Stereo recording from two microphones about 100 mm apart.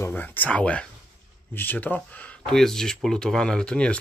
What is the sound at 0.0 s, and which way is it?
Speech, 20° left (ahead or behind).